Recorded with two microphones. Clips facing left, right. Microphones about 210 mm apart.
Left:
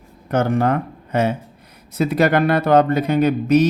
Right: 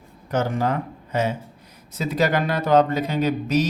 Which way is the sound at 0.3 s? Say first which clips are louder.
Left 5 dB; 60° left (ahead or behind).